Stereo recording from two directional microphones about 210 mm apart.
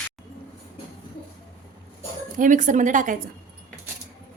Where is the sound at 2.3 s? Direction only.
40° right (ahead or behind).